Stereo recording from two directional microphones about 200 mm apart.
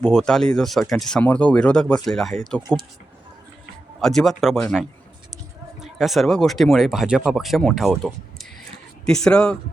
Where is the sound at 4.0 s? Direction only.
Centre (ahead or behind).